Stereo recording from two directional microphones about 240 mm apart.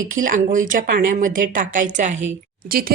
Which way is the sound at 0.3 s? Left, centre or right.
Right.